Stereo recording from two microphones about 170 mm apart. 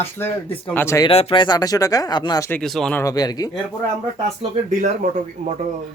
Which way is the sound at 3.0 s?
20° left (ahead or behind).